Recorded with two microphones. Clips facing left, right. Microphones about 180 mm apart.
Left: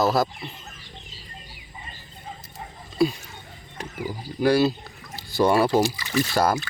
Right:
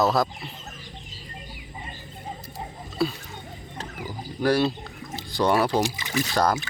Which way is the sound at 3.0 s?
15° left (ahead or behind).